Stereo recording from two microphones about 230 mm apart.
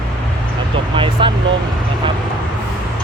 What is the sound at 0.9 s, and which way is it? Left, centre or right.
Speech, right.